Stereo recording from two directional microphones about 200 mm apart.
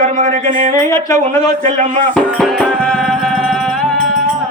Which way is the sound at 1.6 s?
40° right (ahead or behind).